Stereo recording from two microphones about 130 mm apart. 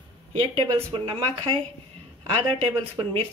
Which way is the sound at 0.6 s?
40° right (ahead or behind).